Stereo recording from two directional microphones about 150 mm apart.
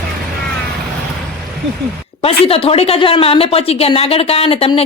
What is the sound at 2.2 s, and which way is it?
Speech, 40° left (ahead or behind).